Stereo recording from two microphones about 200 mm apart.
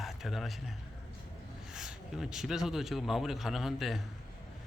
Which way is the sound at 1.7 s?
5° right (ahead or behind).